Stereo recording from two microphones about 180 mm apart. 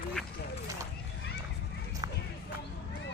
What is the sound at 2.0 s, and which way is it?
Run, 20° right (ahead or behind).